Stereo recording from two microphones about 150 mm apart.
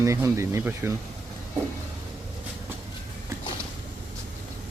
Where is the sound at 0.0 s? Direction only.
20° right (ahead or behind).